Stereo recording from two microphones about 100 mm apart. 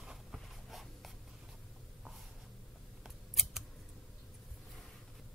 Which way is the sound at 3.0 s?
5° right (ahead or behind).